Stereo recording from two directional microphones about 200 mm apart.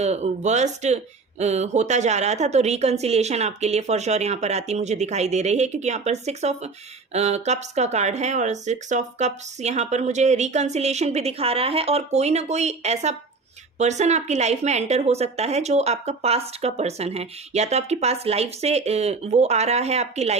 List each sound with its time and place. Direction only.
0.0 s speech: 35° right (ahead or behind)